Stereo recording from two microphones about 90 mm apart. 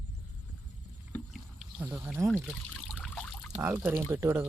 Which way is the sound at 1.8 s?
30° right (ahead or behind).